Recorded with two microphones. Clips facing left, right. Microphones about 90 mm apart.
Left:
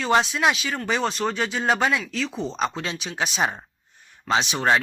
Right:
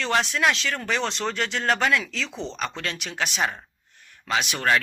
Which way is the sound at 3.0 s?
15° left (ahead or behind).